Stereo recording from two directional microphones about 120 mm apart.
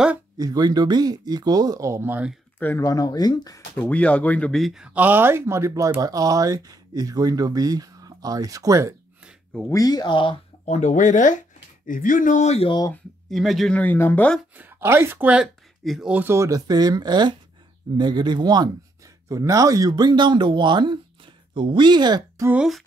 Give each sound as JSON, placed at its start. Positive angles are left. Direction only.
{"t": 0.4, "sound": "speech", "side_deg": -30}
{"t": 2.8, "sound": "speech", "side_deg": 30}
{"t": 3.7, "sound": "speech", "side_deg": 15}
{"t": 9.7, "sound": "speech", "side_deg": 30}
{"t": 10.6, "sound": "speech", "side_deg": 80}
{"t": 13.3, "sound": "speech", "side_deg": 0}
{"t": 13.7, "sound": "speech", "side_deg": 15}
{"t": 14.6, "sound": "speech", "side_deg": -15}
{"t": 16.1, "sound": "speech", "side_deg": -15}
{"t": 22.5, "sound": "speech", "side_deg": -5}